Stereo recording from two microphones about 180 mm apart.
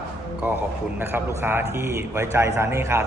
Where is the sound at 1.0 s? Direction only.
10° right (ahead or behind).